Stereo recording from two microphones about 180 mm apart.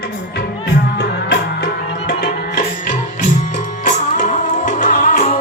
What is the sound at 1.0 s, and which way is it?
Music, 70° left (ahead or behind).